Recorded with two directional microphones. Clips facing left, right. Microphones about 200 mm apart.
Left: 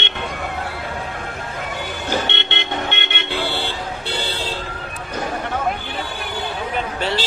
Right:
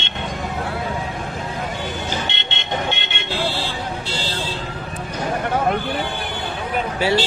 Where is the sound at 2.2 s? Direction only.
60° left (ahead or behind).